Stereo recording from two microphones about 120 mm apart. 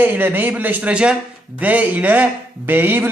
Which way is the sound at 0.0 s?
15° right (ahead or behind).